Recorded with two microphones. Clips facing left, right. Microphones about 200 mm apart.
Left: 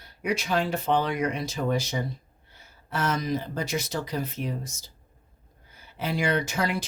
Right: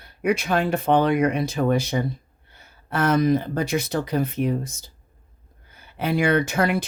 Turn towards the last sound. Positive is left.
turn(degrees=-55)  # may be behind; listen again after turning